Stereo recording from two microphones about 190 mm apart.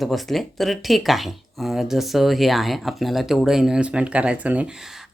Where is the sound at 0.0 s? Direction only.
Centre (ahead or behind).